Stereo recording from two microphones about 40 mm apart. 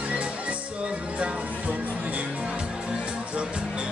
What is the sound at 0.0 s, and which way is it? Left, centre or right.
Music, right.